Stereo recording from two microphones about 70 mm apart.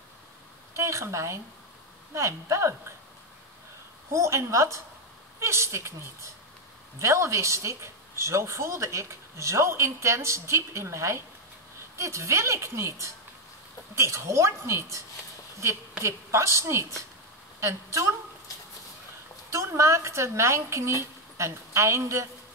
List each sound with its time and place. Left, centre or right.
0.7 s speech: right
4.1 s speech: right
13.9 s a woman's voice: right
19.5 s speech: right